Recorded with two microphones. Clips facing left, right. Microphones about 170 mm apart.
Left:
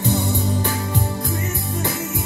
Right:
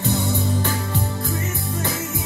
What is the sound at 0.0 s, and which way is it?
Music, 15° left (ahead or behind).